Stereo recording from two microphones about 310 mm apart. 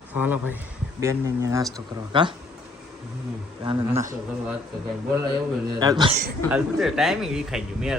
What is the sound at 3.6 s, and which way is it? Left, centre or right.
Speech, centre.